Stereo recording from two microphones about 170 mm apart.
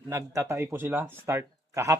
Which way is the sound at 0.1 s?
15° right (ahead or behind).